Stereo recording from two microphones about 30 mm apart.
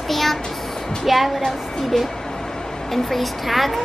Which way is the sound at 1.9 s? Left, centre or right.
Centre.